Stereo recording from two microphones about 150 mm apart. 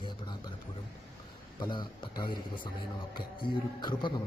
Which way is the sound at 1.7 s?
30° left (ahead or behind).